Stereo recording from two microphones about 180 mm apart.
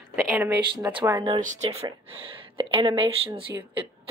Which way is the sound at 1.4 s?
40° right (ahead or behind).